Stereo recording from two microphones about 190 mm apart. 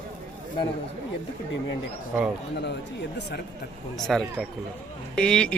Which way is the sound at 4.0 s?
Centre (ahead or behind).